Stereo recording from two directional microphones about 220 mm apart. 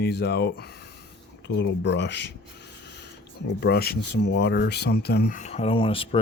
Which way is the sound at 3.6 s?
45° left (ahead or behind).